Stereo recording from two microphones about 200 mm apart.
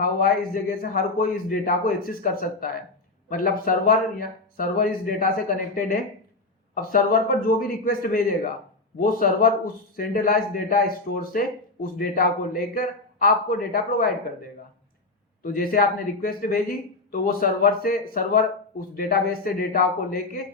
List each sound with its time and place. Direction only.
0.0 s speech: 45° left (ahead or behind)
15.4 s speech: 45° left (ahead or behind)